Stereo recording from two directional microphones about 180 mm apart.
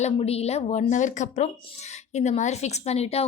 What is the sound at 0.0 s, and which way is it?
A woman's voice, 35° left (ahead or behind).